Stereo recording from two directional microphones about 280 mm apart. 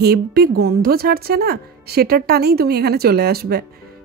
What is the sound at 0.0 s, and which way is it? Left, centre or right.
Speech, right.